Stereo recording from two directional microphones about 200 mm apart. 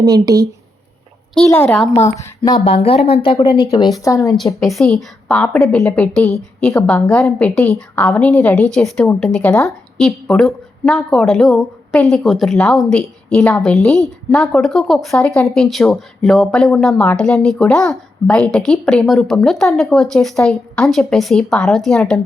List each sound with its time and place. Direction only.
0.0 s speech: 20° right (ahead or behind)
1.5 s a woman's voice: 10° left (ahead or behind)
2.1 s a woman's voice: 15° left (ahead or behind)
2.6 s a woman's voice: 30° left (ahead or behind)
4.6 s a woman's voice: centre (ahead or behind)